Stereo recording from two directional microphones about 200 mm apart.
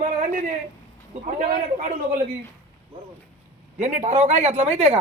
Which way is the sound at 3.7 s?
35° right (ahead or behind).